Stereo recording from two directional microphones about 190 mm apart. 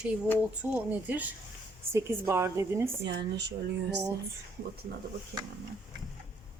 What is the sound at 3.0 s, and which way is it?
Speech, 65° right (ahead or behind).